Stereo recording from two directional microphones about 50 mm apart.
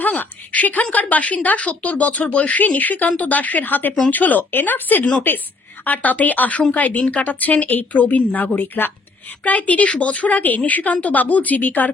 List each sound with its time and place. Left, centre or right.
0.0 s a woman's voice: left